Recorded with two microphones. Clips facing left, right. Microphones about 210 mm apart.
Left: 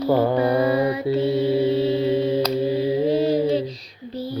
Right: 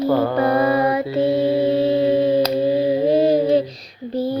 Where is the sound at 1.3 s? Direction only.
20° right (ahead or behind).